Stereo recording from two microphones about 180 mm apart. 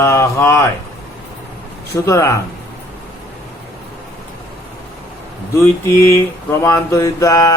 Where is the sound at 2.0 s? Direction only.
15° left (ahead or behind).